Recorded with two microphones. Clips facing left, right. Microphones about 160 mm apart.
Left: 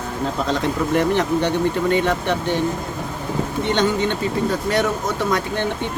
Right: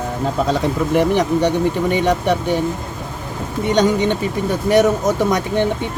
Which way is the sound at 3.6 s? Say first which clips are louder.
Right 5 dB; 15° right (ahead or behind).